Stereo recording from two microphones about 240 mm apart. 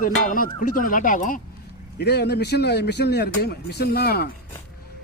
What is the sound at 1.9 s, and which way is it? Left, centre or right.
Speech, left.